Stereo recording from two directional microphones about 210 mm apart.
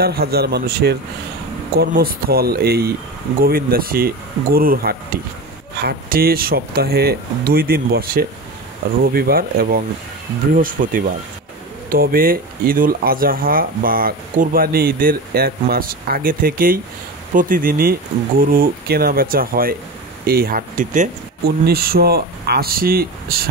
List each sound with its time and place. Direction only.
0.0 s speech: 50° right (ahead or behind)